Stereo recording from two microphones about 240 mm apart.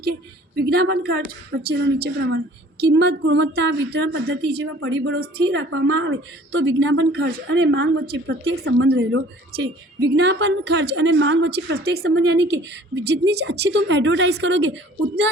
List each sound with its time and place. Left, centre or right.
0.6 s a woman's voice: right
4.8 s a woman's voice: right